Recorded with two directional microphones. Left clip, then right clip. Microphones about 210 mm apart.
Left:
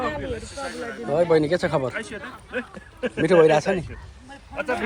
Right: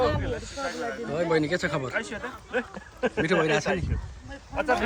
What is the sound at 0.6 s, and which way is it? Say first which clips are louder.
Speech: even; 35° right (ahead or behind).